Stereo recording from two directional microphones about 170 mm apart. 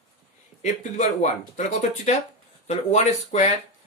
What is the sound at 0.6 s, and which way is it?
Speech, 45° left (ahead or behind).